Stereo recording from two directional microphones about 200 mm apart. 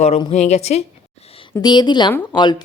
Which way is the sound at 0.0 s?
30° left (ahead or behind).